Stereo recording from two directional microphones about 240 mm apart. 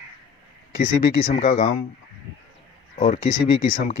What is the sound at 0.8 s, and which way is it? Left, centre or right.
Speech, left.